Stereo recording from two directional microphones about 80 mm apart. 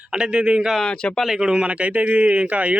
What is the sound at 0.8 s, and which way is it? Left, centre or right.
Speech, centre.